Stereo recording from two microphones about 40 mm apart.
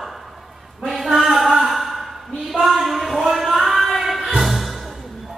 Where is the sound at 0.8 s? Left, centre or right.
Centre.